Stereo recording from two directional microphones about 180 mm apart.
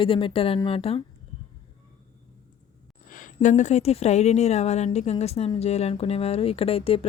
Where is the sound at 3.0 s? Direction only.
45° left (ahead or behind).